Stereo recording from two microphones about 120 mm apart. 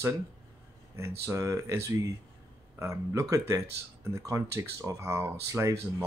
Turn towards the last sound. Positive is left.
turn(degrees=-25)  # may be behind; listen again after turning